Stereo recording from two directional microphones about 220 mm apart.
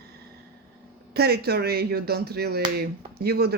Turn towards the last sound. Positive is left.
turn(degrees=-45)  # may be behind; listen again after turning